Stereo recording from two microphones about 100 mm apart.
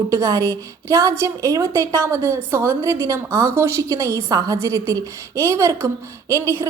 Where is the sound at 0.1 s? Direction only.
35° right (ahead or behind).